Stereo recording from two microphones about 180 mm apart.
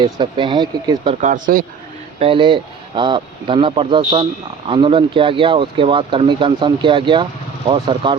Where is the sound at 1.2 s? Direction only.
50° right (ahead or behind).